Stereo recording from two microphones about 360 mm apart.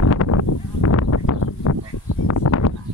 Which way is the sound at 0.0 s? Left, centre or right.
Left.